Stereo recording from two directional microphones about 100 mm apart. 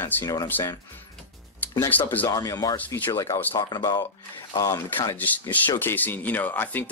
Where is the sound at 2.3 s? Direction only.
40° left (ahead or behind).